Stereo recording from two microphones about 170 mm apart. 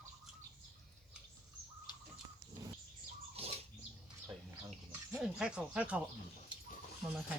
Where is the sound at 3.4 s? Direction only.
35° right (ahead or behind).